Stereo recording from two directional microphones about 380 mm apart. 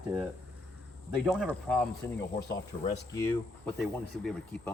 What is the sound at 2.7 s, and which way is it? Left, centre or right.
Speech, centre.